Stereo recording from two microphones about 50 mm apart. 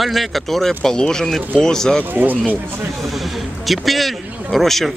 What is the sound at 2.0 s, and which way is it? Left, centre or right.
Speech, right.